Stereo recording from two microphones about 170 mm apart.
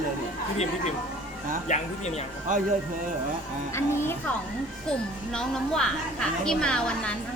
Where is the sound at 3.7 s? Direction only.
15° left (ahead or behind).